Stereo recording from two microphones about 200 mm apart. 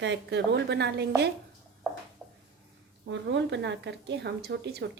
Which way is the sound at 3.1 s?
65° right (ahead or behind).